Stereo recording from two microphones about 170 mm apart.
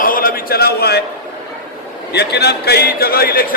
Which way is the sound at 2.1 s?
80° left.